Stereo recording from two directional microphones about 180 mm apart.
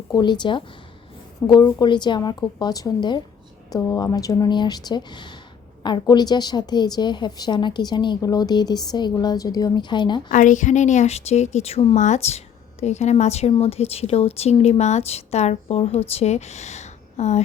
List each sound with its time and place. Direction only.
0.1 s a woman's voice: 25° left (ahead or behind)
10.3 s speech: 45° left (ahead or behind)